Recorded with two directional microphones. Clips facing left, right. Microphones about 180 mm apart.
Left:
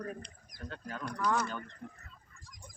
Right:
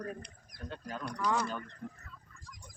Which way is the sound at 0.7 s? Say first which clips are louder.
Right 1 dB; 15° right (ahead or behind).